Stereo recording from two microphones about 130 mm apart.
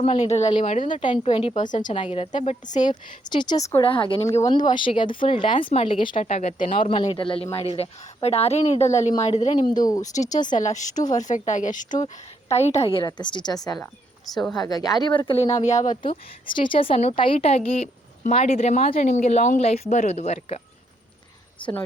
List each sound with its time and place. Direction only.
0.0 s speech: 55° left (ahead or behind)
1.0 s speech: 40° left (ahead or behind)
1.9 s speech: 55° left (ahead or behind)
2.9 s speech: 35° left (ahead or behind)
6.2 s speech: 60° left (ahead or behind)
6.6 s a woman's voice: 45° left (ahead or behind)
9.7 s speech: 30° left (ahead or behind)
10.5 s speech: 70° left (ahead or behind); by 13.1 s 45° left (ahead or behind)
13.1 s speech: 35° left (ahead or behind); by 16.0 s 65° left (ahead or behind)
16.0 s a woman's voice: 40° left (ahead or behind); by 20.6 s 55° left (ahead or behind)
21.6 s speech: 15° left (ahead or behind)